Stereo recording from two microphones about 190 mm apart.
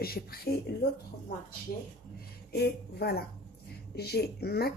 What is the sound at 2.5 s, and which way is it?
Speech, 55° left (ahead or behind).